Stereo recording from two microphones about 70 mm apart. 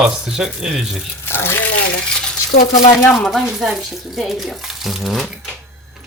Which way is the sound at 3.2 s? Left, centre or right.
Centre.